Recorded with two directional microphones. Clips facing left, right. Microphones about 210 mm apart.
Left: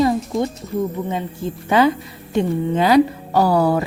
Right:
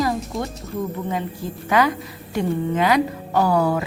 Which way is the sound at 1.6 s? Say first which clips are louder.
Left 4 dB; 30° left (ahead or behind).